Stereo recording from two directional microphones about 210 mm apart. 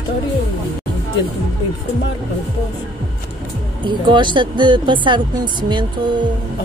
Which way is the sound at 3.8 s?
20° right (ahead or behind).